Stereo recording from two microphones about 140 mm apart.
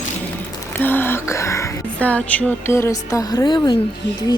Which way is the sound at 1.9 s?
10° left (ahead or behind).